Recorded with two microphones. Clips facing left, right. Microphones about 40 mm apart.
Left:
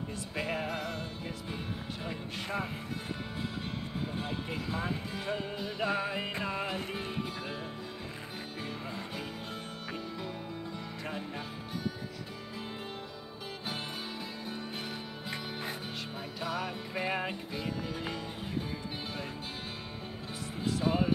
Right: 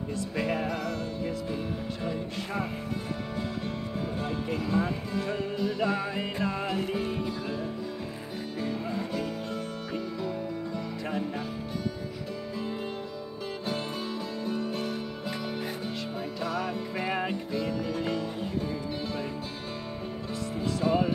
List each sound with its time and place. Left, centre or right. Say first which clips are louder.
0.1 s music: right 6 dB; centre
4.2 s music: right 5 dB; centre
8.5 s music: right 9 dB; centre
11.1 s music: right 6 dB; centre
14.4 s music: right 8 dB; centre
14.8 s music: right 7 dB; left
16.4 s music: right 3 dB; centre
20.6 s music: right 3 dB; centre